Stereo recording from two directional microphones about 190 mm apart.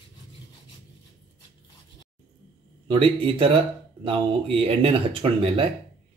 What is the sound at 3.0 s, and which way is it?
Speech, 30° right (ahead or behind).